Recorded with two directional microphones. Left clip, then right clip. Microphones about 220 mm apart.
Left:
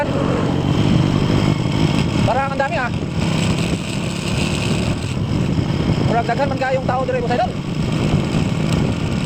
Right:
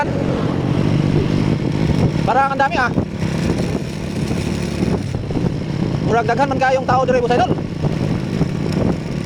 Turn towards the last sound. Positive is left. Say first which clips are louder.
# right 4 dB
turn(degrees=-50)  # may be behind; listen again after turning